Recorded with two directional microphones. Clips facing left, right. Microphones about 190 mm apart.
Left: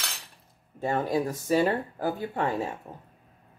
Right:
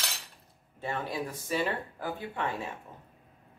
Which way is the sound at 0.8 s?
45° left (ahead or behind).